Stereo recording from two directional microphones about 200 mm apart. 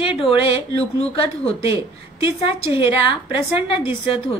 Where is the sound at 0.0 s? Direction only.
25° left (ahead or behind).